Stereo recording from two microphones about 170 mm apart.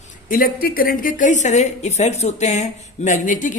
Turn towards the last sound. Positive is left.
turn(degrees=50)  # may be behind; listen again after turning